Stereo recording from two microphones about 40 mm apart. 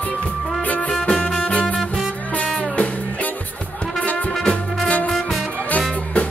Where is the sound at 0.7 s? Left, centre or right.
Left.